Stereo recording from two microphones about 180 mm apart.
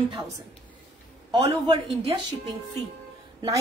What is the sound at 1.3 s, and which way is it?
Speech, 25° right (ahead or behind).